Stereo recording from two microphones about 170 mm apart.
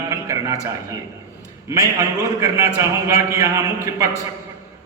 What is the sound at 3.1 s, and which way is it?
Speech, 20° right (ahead or behind).